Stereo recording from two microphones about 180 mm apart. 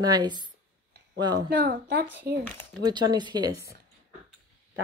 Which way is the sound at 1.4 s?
60° right (ahead or behind).